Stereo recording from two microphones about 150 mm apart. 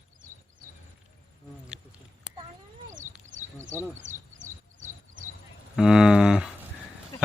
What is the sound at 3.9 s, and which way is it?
Bird, 55° right (ahead or behind).